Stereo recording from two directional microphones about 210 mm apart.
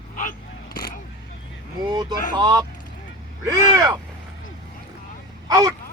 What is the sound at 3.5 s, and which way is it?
Vehicle, 15° right (ahead or behind).